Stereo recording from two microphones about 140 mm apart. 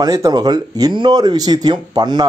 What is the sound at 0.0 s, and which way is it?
Speech, 25° right (ahead or behind).